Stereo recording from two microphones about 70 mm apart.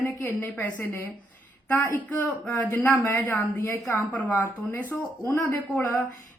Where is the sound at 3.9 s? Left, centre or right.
Left.